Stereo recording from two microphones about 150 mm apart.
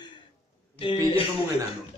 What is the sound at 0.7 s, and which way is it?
Speech, 35° left (ahead or behind).